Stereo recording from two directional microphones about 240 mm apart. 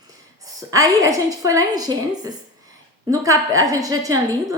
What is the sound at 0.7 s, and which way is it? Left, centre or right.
A woman's voice, centre.